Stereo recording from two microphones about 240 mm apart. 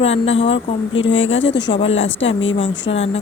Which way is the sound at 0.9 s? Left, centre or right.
Left.